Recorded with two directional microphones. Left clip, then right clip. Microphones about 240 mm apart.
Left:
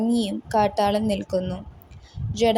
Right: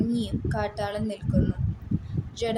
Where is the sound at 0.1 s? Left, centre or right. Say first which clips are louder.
Left 7 dB; left.